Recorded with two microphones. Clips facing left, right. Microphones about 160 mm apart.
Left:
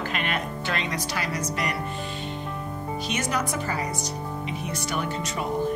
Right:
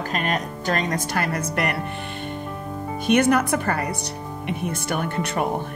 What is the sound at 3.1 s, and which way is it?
Speech, 60° right (ahead or behind).